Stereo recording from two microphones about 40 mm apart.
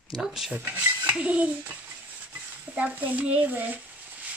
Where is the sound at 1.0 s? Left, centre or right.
Right.